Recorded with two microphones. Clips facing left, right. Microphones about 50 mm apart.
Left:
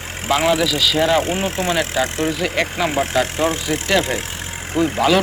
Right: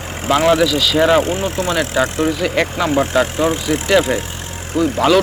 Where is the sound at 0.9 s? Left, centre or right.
Centre.